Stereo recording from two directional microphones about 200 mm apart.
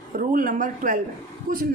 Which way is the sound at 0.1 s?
40° right (ahead or behind).